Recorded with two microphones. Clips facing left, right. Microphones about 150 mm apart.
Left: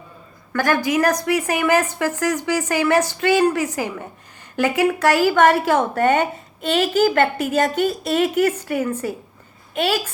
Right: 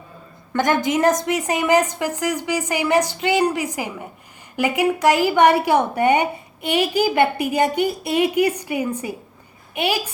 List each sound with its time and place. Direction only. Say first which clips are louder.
0.5 s a woman's voice: even; 20° right (ahead or behind)